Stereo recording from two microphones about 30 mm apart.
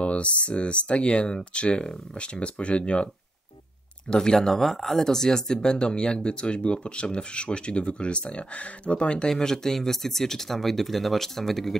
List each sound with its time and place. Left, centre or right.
0.0 s speech: left
4.1 s speech: left
4.4 s speech: centre; by 9.3 s left
9.3 s speech: centre